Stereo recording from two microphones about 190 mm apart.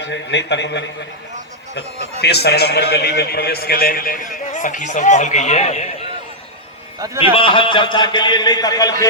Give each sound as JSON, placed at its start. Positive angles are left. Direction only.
{"t": 0.0, "sound": "a man's voice", "side_deg": 65}
{"t": 2.2, "sound": "a man's voice", "side_deg": 60}
{"t": 7.3, "sound": "a man's voice", "side_deg": 25}